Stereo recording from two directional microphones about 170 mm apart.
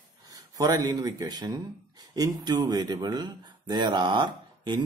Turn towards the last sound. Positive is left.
turn(degrees=-30)  # may be behind; listen again after turning